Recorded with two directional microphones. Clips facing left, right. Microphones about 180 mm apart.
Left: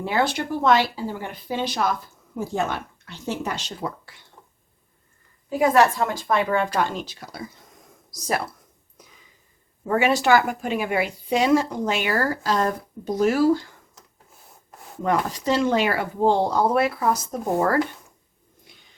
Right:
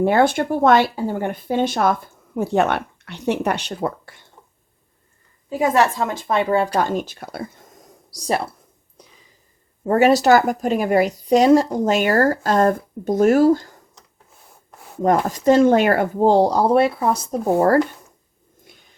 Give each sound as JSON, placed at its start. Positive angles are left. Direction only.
{"t": 0.0, "sound": "speech", "side_deg": -55}
{"t": 5.5, "sound": "a woman's voice", "side_deg": -20}
{"t": 9.8, "sound": "a woman's voice", "side_deg": -40}
{"t": 15.0, "sound": "a woman's voice", "side_deg": -45}